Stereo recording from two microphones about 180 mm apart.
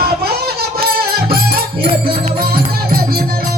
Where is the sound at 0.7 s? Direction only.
60° right (ahead or behind).